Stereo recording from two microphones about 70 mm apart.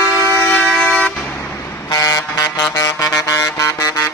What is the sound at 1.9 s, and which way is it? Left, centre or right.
Music, left.